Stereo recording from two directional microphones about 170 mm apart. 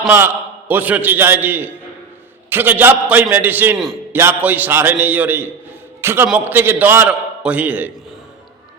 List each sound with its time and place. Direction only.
0.7 s a man's voice: 10° right (ahead or behind)